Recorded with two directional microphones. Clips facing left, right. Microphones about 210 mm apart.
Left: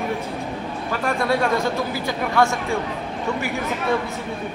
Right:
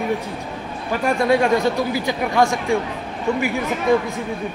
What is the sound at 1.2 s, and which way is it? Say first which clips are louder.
Speech: right 4 dB; 15° right (ahead or behind).